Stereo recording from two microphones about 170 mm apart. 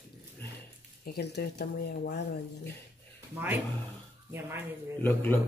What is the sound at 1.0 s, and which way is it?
Speech, 70° left (ahead or behind).